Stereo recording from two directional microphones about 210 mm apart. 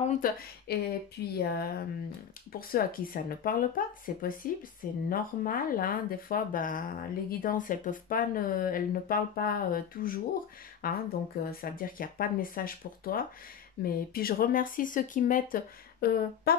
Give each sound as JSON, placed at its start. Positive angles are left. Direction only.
{"t": 0.0, "sound": "speech", "side_deg": 35}
{"t": 0.7, "sound": "speech", "side_deg": 50}